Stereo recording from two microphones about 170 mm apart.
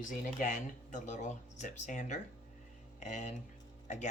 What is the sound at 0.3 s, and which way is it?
Speech, 45° left (ahead or behind).